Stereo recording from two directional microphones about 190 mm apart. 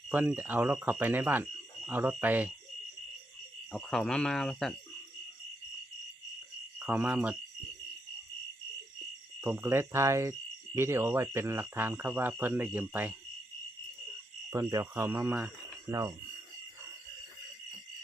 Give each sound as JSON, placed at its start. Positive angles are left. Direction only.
{"t": 0.1, "sound": "speech", "side_deg": -10}
{"t": 3.7, "sound": "speech", "side_deg": 5}
{"t": 6.7, "sound": "speech", "side_deg": -10}
{"t": 9.4, "sound": "speech", "side_deg": -10}
{"t": 14.5, "sound": "speech", "side_deg": -15}